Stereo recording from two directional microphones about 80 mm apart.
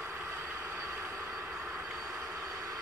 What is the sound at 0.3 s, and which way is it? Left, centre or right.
Train, right.